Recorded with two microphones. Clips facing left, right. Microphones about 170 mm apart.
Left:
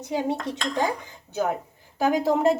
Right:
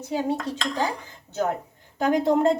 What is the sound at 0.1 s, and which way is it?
Dishes, 20° left (ahead or behind).